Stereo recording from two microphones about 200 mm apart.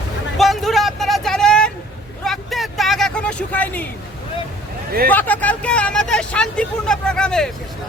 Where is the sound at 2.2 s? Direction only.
Centre (ahead or behind).